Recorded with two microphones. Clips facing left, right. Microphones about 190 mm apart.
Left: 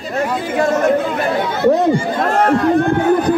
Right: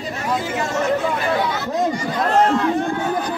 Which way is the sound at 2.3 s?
55° left (ahead or behind).